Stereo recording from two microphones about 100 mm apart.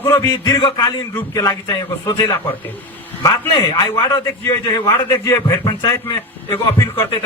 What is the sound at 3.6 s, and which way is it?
Speech, 40° left (ahead or behind).